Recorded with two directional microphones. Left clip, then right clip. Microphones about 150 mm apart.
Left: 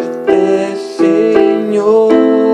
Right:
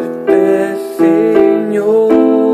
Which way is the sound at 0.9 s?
35° right (ahead or behind).